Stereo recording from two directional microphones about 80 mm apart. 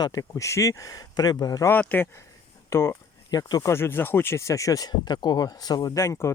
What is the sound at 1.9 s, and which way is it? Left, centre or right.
Speech, left.